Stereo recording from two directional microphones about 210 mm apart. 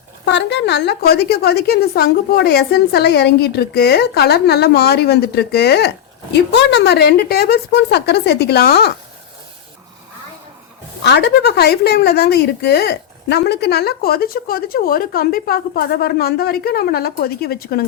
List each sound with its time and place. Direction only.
0.3 s a woman's voice: 55° left (ahead or behind)
11.0 s a woman's voice: 55° left (ahead or behind)